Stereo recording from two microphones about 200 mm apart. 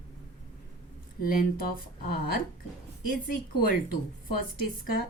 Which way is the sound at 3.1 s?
45° left (ahead or behind).